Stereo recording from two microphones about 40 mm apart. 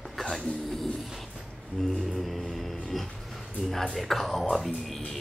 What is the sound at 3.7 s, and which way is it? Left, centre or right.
Speech, centre.